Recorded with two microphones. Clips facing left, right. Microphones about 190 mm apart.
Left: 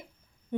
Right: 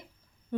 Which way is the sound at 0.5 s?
20° left (ahead or behind).